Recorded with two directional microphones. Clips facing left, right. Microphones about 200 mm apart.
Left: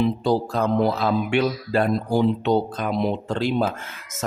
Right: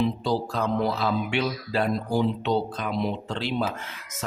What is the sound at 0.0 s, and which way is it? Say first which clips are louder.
A man's voice: left 4 dB; 50° left (ahead or behind).